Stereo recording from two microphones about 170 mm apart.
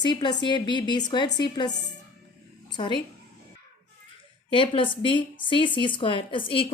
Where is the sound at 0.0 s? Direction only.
25° left (ahead or behind).